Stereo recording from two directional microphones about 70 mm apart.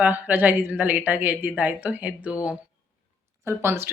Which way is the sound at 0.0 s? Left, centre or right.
Right.